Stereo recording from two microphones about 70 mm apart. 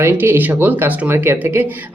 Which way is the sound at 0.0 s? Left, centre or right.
Right.